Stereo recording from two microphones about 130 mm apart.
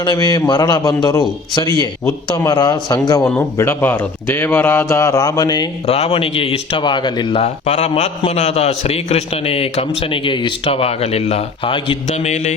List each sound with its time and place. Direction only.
0.0 s a man's voice: 30° left (ahead or behind)
5.8 s a man's voice: 50° left (ahead or behind)
7.4 s a man's voice: 60° left (ahead or behind); by 11.9 s 45° left (ahead or behind)
12.0 s a man's voice: 60° left (ahead or behind)